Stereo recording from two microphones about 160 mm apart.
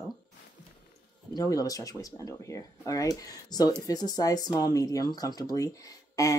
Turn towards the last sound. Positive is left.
turn(degrees=20)  # may be behind; listen again after turning